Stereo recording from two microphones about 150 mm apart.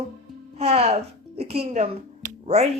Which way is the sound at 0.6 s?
45° right (ahead or behind).